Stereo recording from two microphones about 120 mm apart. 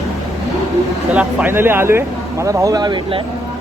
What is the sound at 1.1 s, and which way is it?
Speech, 10° right (ahead or behind).